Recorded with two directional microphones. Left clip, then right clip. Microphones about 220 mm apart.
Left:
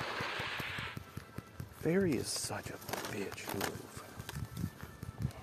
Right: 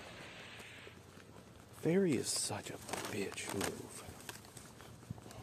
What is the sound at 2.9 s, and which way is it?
Speech, 45° left (ahead or behind).